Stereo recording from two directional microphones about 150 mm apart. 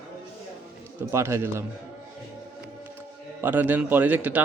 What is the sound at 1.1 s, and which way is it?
Speech, 15° right (ahead or behind).